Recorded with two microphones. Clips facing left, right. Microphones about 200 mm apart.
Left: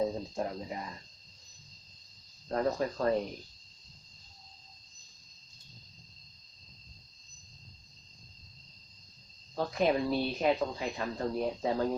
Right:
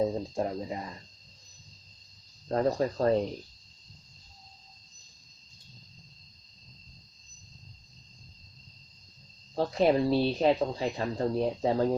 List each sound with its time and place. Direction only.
0.0 s speech: 25° right (ahead or behind)
2.5 s speech: 30° right (ahead or behind)
9.6 s speech: 30° right (ahead or behind)